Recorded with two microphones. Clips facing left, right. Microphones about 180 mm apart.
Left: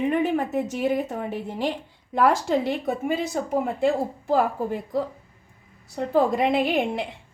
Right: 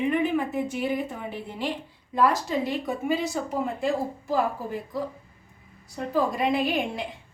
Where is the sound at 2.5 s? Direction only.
55° left (ahead or behind).